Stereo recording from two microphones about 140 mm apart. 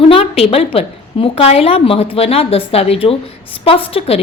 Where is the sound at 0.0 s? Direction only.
45° left (ahead or behind).